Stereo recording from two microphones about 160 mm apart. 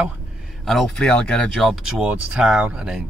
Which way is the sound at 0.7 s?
Centre (ahead or behind).